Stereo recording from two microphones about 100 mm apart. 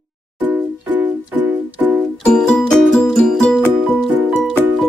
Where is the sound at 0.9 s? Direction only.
20° right (ahead or behind).